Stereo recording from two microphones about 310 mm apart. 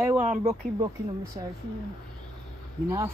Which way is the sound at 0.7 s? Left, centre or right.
Centre.